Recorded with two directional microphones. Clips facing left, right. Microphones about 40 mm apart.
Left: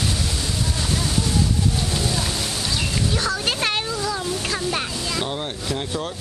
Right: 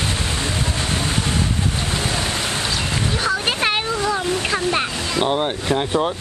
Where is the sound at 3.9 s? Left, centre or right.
Right.